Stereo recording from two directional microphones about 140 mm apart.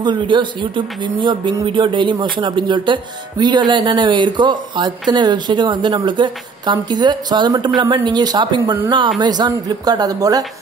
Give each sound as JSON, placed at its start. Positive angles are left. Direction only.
{"t": 0.0, "sound": "a woman's voice", "side_deg": -35}